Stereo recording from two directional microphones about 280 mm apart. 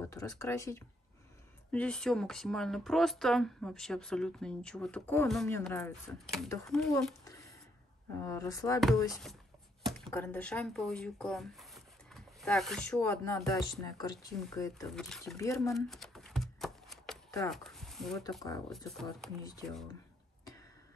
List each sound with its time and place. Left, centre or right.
0.1 s speech: centre
10.0 s speech: centre
15.7 s a sound: centre
17.5 s speech: centre